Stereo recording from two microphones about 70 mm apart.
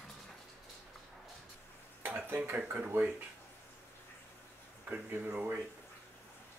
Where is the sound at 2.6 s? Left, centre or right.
Right.